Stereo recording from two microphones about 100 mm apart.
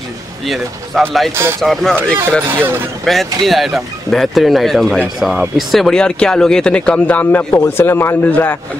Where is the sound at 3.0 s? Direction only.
Centre (ahead or behind).